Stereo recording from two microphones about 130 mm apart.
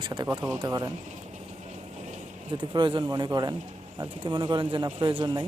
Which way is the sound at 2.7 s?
35° right (ahead or behind).